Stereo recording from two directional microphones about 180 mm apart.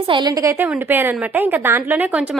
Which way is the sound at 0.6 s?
10° right (ahead or behind).